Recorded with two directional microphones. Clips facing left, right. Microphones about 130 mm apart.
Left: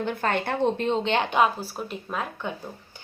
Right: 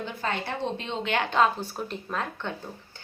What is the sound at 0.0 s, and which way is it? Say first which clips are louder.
Speech: left 5 dB; 60° left (ahead or behind).